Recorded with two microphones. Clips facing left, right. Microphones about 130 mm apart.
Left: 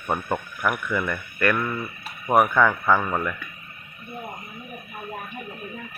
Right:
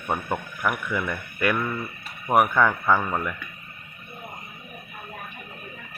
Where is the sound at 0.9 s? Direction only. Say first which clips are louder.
Left 2 dB; 10° right (ahead or behind).